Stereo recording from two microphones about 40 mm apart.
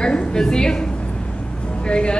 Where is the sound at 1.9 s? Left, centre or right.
Left.